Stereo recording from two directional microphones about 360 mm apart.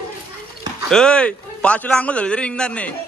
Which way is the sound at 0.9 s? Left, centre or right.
Centre.